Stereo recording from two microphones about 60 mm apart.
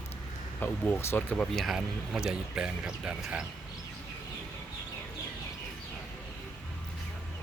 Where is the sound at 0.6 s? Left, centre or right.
Left.